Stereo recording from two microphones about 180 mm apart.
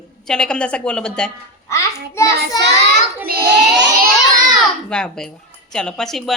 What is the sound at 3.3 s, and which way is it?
Child singing, 60° right (ahead or behind).